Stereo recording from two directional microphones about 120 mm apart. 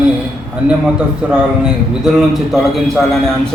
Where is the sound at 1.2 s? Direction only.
5° right (ahead or behind).